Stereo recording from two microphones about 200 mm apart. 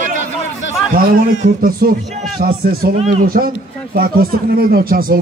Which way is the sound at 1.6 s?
45° right (ahead or behind).